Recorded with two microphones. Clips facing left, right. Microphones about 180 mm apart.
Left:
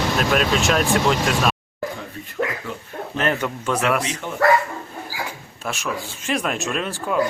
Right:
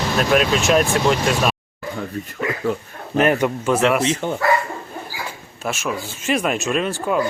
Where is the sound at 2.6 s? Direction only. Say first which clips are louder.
Right 7 dB; 50° right (ahead or behind).